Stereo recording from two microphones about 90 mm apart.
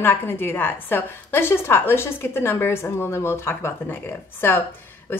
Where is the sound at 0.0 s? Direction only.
20° left (ahead or behind).